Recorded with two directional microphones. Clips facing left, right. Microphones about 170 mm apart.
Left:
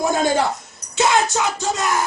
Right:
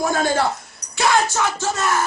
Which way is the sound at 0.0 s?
20° left (ahead or behind).